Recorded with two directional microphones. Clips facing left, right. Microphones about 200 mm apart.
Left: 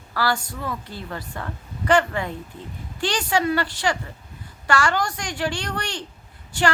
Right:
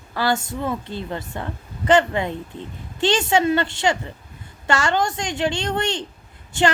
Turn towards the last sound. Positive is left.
turn(degrees=-25)  # may be behind; listen again after turning